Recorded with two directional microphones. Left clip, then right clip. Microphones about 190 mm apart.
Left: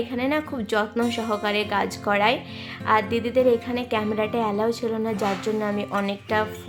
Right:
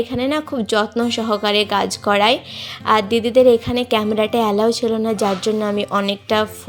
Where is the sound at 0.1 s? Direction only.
25° right (ahead or behind).